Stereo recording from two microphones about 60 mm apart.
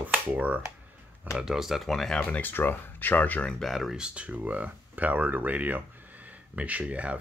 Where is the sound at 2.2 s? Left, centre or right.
Left.